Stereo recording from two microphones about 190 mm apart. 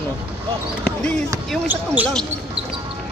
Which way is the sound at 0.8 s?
5° left (ahead or behind).